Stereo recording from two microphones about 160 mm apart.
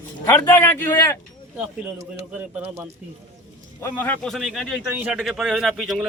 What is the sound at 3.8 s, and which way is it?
A man's voice, 10° left (ahead or behind).